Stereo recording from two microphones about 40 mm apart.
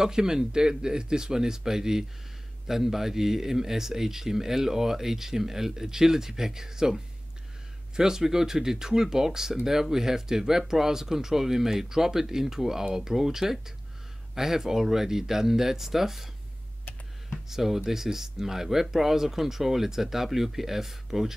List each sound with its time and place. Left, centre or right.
0.0 s speech: centre
17.5 s speech: centre